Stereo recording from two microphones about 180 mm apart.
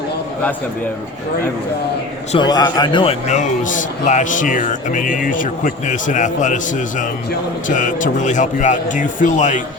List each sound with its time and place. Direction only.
2.3 s a man's voice: 25° left (ahead or behind); by 9.6 s 45° left (ahead or behind)